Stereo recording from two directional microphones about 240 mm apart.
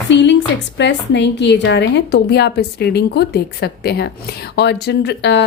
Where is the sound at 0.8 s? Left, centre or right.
Left.